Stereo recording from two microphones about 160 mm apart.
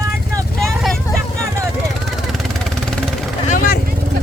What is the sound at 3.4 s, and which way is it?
Vehicle, 65° left (ahead or behind).